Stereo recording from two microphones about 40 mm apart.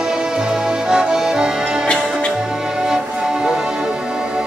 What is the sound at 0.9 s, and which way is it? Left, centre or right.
Music, centre.